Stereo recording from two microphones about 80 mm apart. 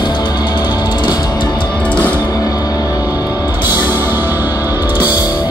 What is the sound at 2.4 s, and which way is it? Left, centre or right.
Music, left.